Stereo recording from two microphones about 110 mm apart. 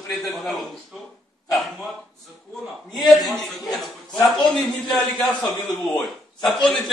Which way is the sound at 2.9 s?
Centre (ahead or behind).